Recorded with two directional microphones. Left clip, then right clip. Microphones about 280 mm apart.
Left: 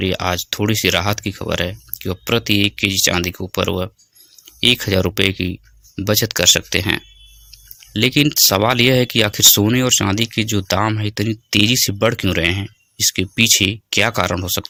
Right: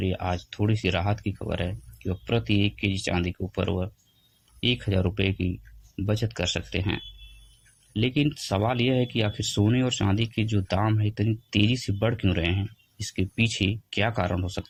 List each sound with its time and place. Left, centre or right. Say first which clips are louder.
0.0 s speech: left 10 dB; left